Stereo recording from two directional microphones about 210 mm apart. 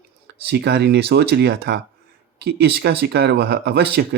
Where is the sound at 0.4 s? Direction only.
50° right (ahead or behind).